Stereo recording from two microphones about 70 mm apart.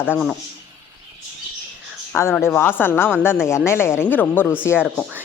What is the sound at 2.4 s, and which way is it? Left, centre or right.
Speech, left.